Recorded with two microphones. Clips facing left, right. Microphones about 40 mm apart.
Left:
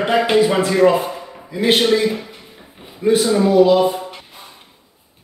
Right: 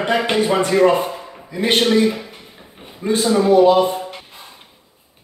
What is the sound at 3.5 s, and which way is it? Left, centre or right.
Speech, right.